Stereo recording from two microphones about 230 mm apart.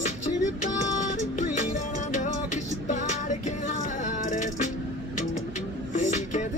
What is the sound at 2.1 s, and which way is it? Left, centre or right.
Music, left.